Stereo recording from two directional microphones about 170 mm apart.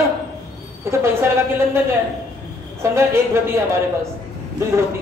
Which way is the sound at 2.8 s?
15° right (ahead or behind).